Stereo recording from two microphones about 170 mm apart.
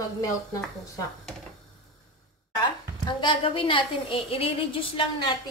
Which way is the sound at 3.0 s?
25° left (ahead or behind).